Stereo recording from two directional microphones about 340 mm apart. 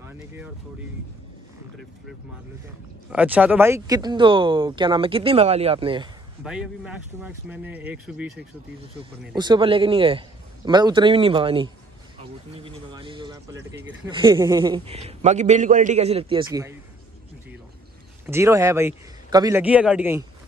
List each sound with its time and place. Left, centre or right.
3.1 s speech: centre
6.4 s speech: centre
9.3 s speech: centre
18.2 s speech: centre